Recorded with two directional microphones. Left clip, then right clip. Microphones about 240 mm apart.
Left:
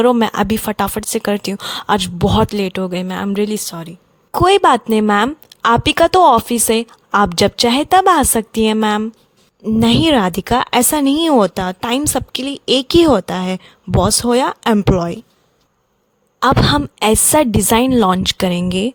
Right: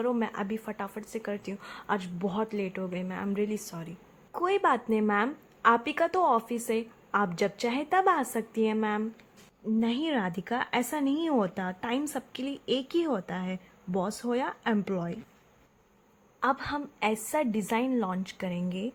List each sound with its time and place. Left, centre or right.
0.0 s speech: left
16.4 s speech: left